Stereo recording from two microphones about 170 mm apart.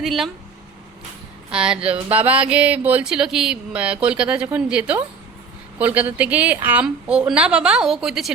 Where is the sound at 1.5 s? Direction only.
5° right (ahead or behind).